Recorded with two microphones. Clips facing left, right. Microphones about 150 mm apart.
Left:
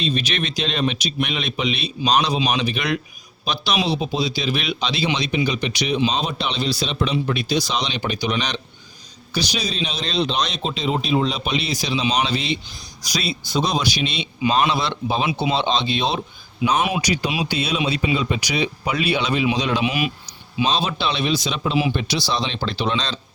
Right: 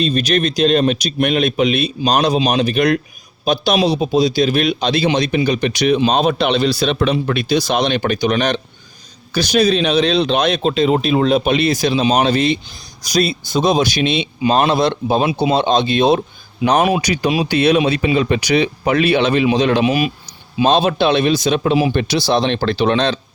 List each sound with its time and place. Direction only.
0.0 s a man's voice: 45° right (ahead or behind)
20.6 s a man's voice: 55° right (ahead or behind)